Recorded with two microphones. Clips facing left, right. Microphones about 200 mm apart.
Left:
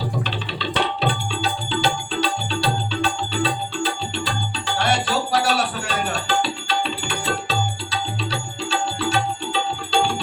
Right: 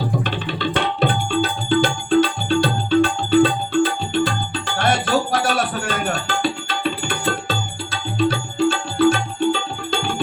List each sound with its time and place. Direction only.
0.3 s music: 50° right (ahead or behind)